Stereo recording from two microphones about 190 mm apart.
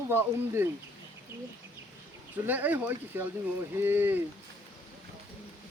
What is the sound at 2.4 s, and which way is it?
Speech, 10° right (ahead or behind).